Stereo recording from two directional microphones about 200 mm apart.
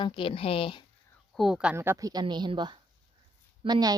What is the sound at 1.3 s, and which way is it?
A woman's voice, centre (ahead or behind).